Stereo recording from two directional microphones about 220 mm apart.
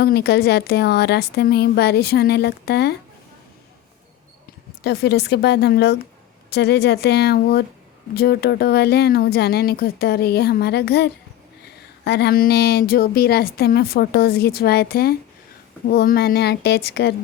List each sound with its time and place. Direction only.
0.0 s speech: 45° left (ahead or behind)
4.8 s speech: 50° left (ahead or behind)